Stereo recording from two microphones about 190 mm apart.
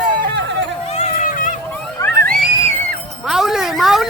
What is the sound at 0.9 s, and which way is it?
Run, 35° left (ahead or behind).